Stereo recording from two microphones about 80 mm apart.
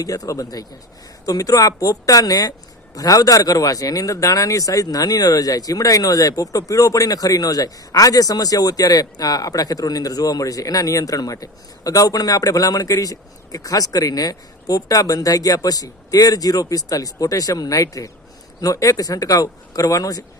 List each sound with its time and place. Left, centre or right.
0.0 s speech: left